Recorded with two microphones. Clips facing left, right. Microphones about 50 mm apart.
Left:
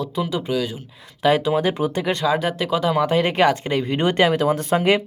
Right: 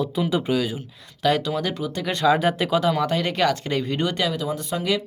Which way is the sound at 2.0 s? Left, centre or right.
Centre.